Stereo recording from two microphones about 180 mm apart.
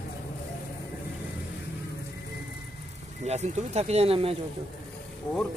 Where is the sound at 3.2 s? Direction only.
40° right (ahead or behind).